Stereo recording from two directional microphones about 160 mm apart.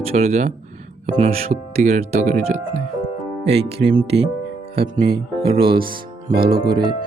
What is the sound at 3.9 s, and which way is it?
Speech, 35° right (ahead or behind).